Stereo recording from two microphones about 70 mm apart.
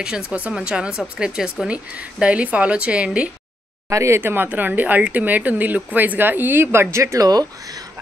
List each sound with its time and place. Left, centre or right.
0.3 s speech: centre
3.9 s speech: right
7.2 s speech: right